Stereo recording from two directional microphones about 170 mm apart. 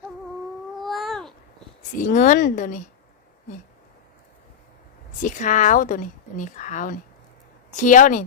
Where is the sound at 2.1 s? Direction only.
50° left (ahead or behind).